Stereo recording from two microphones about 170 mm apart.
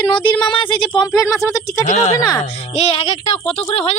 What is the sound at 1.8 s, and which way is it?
Speech, 40° left (ahead or behind).